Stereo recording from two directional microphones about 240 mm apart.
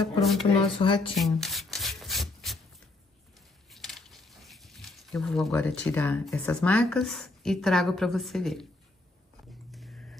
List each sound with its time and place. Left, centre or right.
0.2 s speech: centre
0.5 s speech: left
1.1 s rub: centre
3.7 s speech: centre